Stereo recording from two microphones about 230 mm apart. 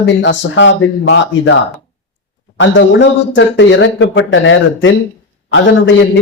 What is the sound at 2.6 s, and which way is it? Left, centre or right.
A man's voice, left.